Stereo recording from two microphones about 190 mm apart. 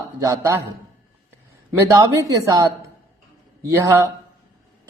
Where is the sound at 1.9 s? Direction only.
15° right (ahead or behind).